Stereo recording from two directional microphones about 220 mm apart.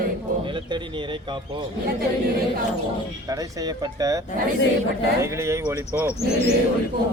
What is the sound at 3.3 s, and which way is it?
Speech, 15° right (ahead or behind).